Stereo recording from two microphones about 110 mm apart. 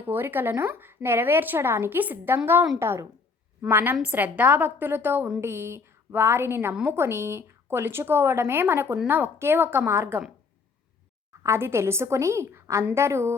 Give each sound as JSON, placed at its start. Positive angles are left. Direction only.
{"t": 0.0, "sound": "a woman's voice", "side_deg": -20}
{"t": 11.4, "sound": "a woman's voice", "side_deg": -25}